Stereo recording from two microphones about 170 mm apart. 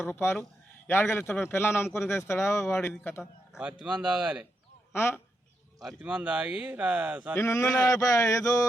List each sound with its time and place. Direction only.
0.0 s a man's voice: 10° left (ahead or behind)
2.9 s speech: 5° left (ahead or behind)
4.9 s a man's voice: 15° left (ahead or behind)
6.0 s speech: 5° right (ahead or behind)
7.3 s a man's voice: 20° left (ahead or behind)
7.8 s male singing: 20° left (ahead or behind)